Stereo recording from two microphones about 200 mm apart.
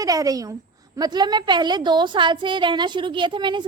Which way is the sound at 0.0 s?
15° right (ahead or behind).